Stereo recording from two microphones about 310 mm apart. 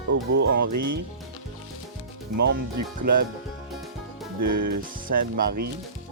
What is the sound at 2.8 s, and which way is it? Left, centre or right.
Speech, right.